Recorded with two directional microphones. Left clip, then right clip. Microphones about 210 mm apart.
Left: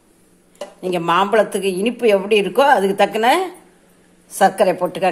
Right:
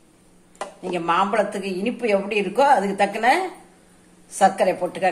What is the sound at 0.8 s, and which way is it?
A woman's voice, 45° left (ahead or behind).